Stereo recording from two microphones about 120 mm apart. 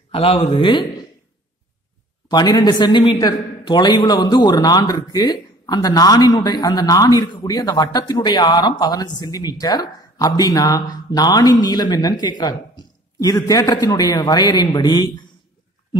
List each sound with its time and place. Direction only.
0.1 s speech: 55° left (ahead or behind)
2.2 s a woman's voice: 35° left (ahead or behind)